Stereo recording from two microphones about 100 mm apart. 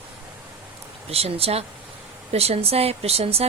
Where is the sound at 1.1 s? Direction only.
90° right.